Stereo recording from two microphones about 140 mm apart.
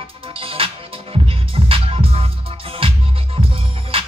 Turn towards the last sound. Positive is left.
turn(degrees=-40)  # may be behind; listen again after turning